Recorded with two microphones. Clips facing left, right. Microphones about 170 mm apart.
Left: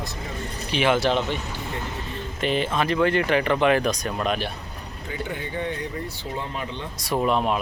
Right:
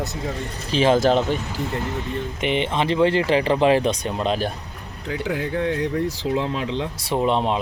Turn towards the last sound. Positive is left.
turn(degrees=-25)  # may be behind; listen again after turning